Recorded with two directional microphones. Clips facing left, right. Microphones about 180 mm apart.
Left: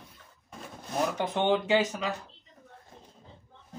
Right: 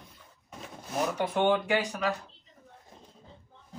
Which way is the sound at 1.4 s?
20° left (ahead or behind).